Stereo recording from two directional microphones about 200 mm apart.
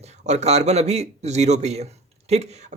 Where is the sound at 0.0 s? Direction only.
35° right (ahead or behind).